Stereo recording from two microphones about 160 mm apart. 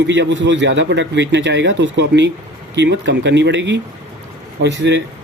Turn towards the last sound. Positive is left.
turn(degrees=-90)